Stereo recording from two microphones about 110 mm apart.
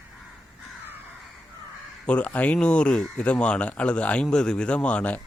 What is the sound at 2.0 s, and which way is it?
Speech, 10° left (ahead or behind).